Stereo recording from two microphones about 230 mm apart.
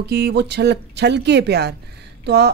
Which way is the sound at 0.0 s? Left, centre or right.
Right.